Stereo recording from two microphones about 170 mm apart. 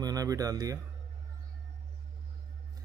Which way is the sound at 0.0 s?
20° right (ahead or behind).